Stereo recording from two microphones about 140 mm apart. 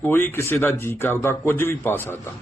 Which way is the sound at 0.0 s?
15° left (ahead or behind).